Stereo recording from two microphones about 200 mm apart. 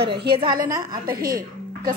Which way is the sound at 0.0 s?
55° right (ahead or behind).